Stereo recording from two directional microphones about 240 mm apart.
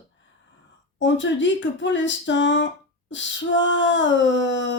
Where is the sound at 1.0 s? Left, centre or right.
Left.